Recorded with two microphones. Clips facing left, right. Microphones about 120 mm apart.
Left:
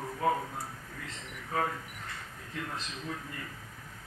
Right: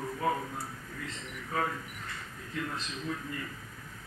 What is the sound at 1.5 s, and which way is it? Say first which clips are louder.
A man's voice: left 1 dB; 35° left (ahead or behind).